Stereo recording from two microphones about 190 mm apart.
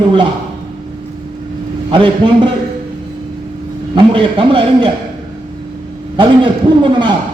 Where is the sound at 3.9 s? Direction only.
30° right (ahead or behind).